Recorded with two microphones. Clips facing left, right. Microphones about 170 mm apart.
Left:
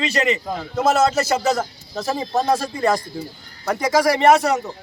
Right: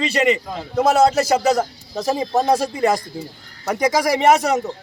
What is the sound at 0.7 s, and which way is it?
A man's voice, 15° right (ahead or behind).